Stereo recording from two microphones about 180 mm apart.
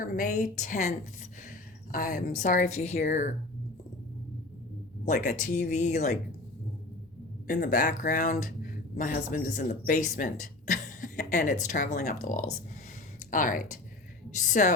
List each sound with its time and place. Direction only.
0.0 s a woman's voice: 50° left (ahead or behind)
5.0 s speech: 45° left (ahead or behind)
7.4 s speech: 50° left (ahead or behind)